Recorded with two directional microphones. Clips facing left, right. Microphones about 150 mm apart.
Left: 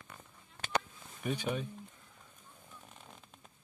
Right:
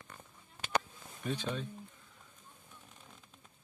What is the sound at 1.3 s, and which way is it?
Speech, 15° left (ahead or behind).